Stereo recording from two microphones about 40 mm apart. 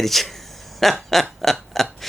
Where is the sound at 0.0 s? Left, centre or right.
Centre.